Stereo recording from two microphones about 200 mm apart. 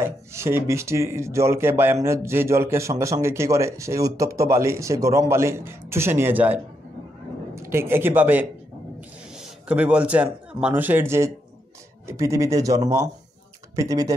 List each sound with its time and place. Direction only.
0.0 s a man's voice: 15° right (ahead or behind)